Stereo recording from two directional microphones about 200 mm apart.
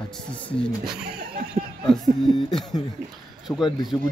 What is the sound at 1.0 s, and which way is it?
Speech, 50° right (ahead or behind).